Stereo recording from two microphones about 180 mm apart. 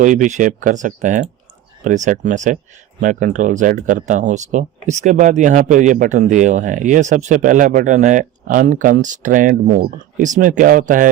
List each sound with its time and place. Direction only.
0.0 s speech: 45° right (ahead or behind)